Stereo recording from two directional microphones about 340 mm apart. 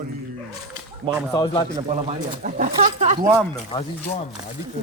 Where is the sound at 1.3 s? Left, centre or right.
Centre.